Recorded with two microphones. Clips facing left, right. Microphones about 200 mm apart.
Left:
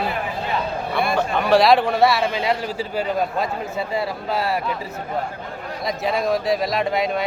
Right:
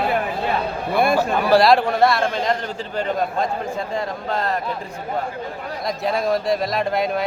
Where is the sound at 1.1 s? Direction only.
5° right (ahead or behind).